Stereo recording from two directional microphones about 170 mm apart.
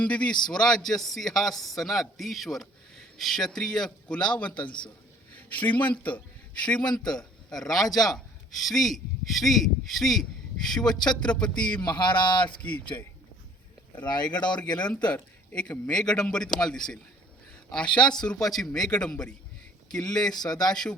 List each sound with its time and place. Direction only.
0.0 s a man's voice: 5° left (ahead or behind)
11.9 s speech: 25° left (ahead or behind)
12.6 s a man's voice: 10° left (ahead or behind)
14.8 s a man's voice: 5° left (ahead or behind)